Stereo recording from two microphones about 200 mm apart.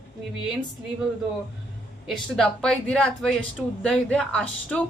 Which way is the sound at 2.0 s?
Centre (ahead or behind).